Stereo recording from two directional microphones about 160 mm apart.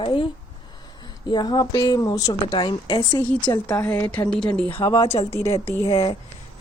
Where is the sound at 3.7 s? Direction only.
10° left (ahead or behind).